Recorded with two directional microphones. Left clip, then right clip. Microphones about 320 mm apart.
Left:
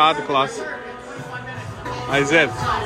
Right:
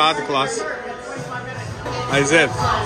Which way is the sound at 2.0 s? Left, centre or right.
Centre.